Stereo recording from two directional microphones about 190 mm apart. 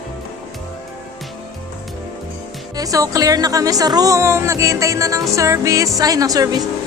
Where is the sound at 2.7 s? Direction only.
20° right (ahead or behind).